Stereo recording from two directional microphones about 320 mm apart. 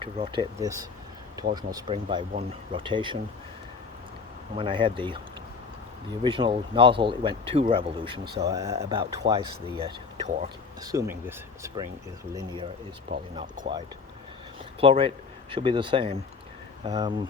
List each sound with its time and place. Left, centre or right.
0.0 s speech: centre
4.5 s speech: centre
6.2 s speech: centre
8.2 s speech: right
8.4 s speech: centre
13.3 s speech: centre